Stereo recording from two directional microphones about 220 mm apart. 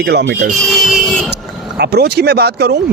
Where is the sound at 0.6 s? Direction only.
Centre (ahead or behind).